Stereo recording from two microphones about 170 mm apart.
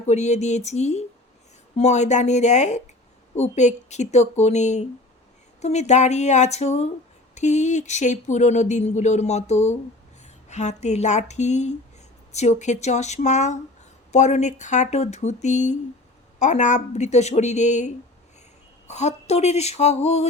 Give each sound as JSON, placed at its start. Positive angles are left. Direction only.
{"t": 0.0, "sound": "speech", "side_deg": 40}